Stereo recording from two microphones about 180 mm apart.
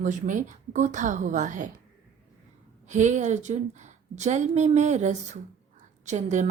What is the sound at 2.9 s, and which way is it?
A woman's voice, 40° right (ahead or behind).